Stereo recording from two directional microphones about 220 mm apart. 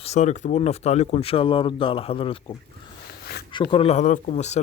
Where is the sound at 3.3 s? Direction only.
45° left (ahead or behind).